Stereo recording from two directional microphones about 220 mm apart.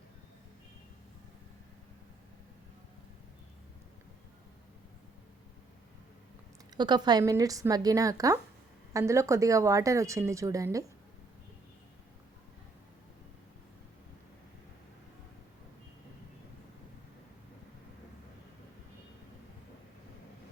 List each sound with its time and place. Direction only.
6.7 s speech: 20° right (ahead or behind)